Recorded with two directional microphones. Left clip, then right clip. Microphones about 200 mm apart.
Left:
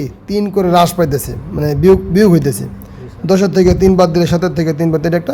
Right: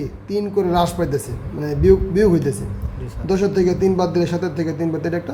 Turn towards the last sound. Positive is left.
turn(degrees=55)  # may be behind; listen again after turning